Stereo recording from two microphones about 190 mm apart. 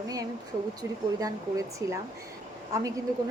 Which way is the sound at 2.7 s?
15° right (ahead or behind).